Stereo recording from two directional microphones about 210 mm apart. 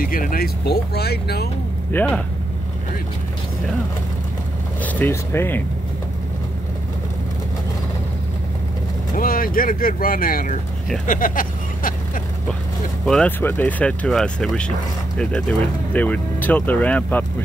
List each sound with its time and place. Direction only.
0.0 s speech: 40° left (ahead or behind)
1.9 s speech: 5° left (ahead or behind)
4.8 s speech: 10° left (ahead or behind)
9.1 s speech: 40° left (ahead or behind)
11.1 s vehicle: 40° left (ahead or behind)
13.0 s speech: 5° left (ahead or behind)